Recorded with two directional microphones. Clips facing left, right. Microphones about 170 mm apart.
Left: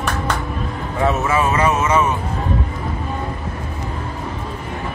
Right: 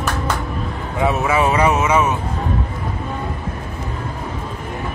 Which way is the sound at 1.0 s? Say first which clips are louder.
Right 1 dB; 10° right (ahead or behind).